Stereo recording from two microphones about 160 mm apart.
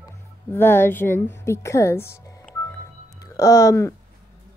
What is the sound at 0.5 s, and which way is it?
A woman's voice, 15° left (ahead or behind).